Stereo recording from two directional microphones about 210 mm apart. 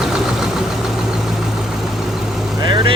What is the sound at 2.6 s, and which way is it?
Vehicle, 25° right (ahead or behind).